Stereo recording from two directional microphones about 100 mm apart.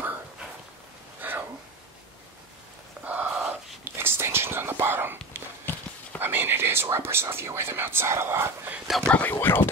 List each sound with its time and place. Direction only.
1.2 s a sound: 20° right (ahead or behind)
3.1 s whispering: 20° right (ahead or behind)
6.2 s speech: 20° right (ahead or behind)
8.8 s speech: centre (ahead or behind)
9.3 s speech: 20° left (ahead or behind)